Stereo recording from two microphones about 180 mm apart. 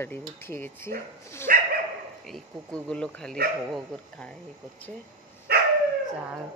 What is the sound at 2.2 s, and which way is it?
Speech, 5° left (ahead or behind).